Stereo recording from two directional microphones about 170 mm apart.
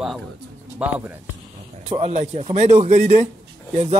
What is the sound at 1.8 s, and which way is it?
Speech, 35° right (ahead or behind).